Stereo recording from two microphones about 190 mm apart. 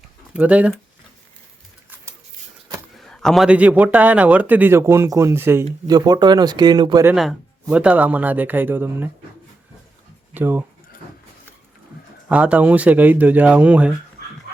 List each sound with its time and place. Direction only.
0.3 s a man's voice: 5° right (ahead or behind)
2.9 s a man's voice: centre (ahead or behind); by 7.1 s 20° right (ahead or behind)
7.1 s a man's voice: 5° right (ahead or behind)
10.3 s speech: 10° right (ahead or behind)
12.3 s a man's voice: 5° right (ahead or behind)